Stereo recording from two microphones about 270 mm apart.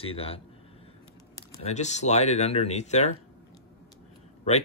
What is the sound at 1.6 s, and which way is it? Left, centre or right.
Speech, left.